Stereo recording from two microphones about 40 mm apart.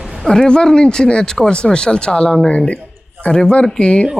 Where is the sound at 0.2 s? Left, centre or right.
Centre.